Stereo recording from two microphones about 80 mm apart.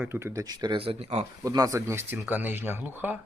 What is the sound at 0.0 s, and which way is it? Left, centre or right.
Speech, right.